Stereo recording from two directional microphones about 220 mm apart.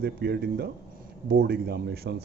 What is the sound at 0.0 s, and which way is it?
A man's voice, 45° right (ahead or behind).